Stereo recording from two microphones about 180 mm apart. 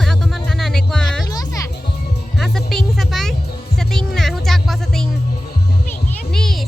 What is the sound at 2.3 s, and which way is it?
Music, centre (ahead or behind).